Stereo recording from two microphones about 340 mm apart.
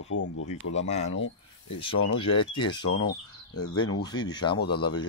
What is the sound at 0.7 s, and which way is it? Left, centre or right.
Speech, centre.